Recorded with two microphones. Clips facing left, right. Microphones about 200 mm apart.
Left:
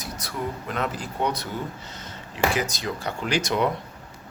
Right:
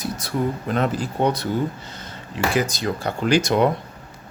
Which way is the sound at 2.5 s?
30° right (ahead or behind).